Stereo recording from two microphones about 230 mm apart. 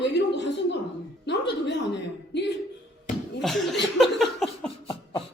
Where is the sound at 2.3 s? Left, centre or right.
Left.